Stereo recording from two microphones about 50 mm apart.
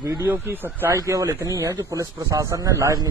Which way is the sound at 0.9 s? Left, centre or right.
Right.